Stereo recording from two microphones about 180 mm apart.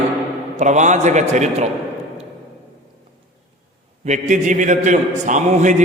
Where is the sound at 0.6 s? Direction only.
40° right (ahead or behind).